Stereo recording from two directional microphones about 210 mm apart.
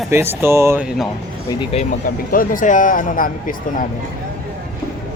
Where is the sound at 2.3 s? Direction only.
40° left (ahead or behind).